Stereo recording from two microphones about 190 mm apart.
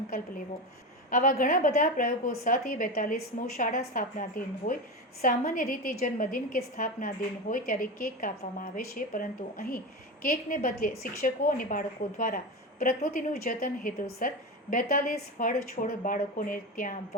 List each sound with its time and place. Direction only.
1.1 s a woman's voice: 45° left (ahead or behind)